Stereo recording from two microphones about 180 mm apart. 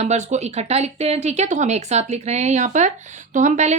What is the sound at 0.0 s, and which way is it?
A woman's voice, 40° right (ahead or behind).